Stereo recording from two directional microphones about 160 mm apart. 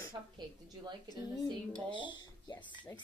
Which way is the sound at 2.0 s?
30° left (ahead or behind).